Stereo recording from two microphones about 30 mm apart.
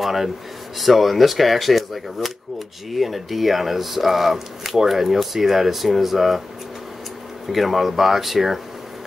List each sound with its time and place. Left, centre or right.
0.0 s speech: centre
7.4 s speech: centre